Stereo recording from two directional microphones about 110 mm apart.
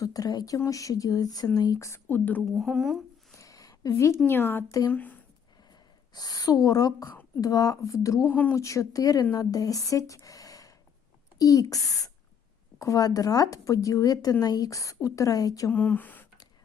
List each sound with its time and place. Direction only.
0.0 s speech: 35° left (ahead or behind); by 2.4 s 15° left (ahead or behind)
2.6 s speech: centre (ahead or behind)
3.3 s a sound: 30° left (ahead or behind)
4.3 s speech: 20° left (ahead or behind)
6.1 s speech: 35° left (ahead or behind)
15.7 s speech: 15° left (ahead or behind)